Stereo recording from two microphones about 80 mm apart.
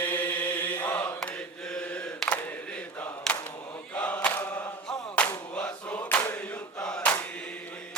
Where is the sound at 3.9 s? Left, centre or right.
Centre.